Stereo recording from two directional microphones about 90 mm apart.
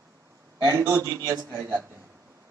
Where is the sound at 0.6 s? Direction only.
40° right (ahead or behind).